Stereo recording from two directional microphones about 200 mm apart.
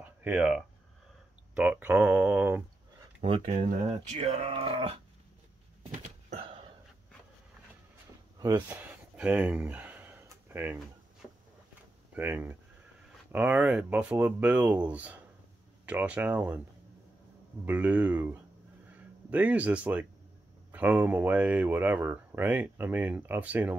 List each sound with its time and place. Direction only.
0.0 s speech: 5° right (ahead or behind)
3.2 s speech: 30° right (ahead or behind)
6.0 s a sound: 30° right (ahead or behind)
8.4 s speech: 15° right (ahead or behind)
9.1 s a sound: 5° right (ahead or behind)
12.2 s speech: 10° right (ahead or behind)
17.6 s speech: 5° right (ahead or behind)